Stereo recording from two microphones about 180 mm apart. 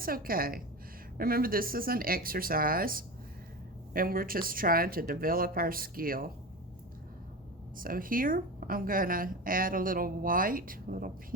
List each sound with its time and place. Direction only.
0.0 s a woman's voice: 55° right (ahead or behind)
7.8 s a woman's voice: 50° right (ahead or behind)